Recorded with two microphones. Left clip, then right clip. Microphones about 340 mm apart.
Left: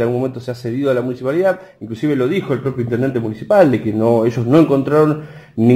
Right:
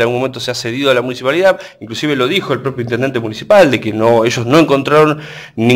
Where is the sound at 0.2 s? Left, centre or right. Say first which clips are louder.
Right 5 dB; right.